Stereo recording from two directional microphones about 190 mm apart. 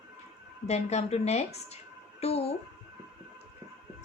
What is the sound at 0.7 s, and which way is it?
A woman's voice, 35° left (ahead or behind).